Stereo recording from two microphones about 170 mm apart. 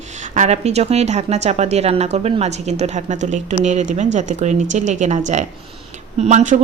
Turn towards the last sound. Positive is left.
turn(degrees=-45)  # may be behind; listen again after turning